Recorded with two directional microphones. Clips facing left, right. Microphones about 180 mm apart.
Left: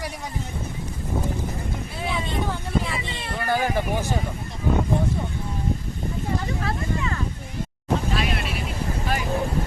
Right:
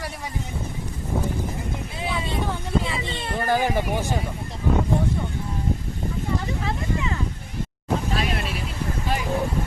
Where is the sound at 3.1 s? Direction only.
30° right (ahead or behind).